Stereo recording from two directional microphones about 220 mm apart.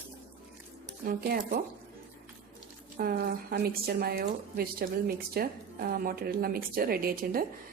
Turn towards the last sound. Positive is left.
turn(degrees=-40)  # may be behind; listen again after turning